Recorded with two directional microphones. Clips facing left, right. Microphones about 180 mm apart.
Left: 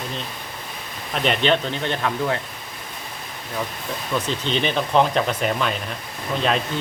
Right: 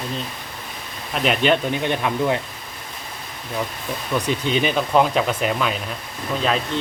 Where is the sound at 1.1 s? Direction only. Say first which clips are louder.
Right 1 dB; 5° right (ahead or behind).